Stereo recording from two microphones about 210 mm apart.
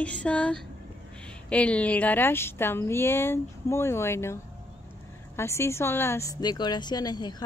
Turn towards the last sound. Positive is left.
turn(degrees=20)  # may be behind; listen again after turning